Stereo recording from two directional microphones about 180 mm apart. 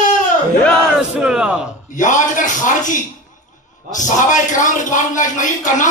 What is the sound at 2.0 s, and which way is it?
Speech, 45° left (ahead or behind).